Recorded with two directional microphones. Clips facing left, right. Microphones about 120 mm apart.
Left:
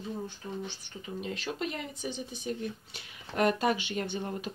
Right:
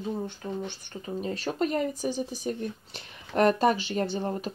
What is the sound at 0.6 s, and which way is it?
A woman's voice, 40° right (ahead or behind).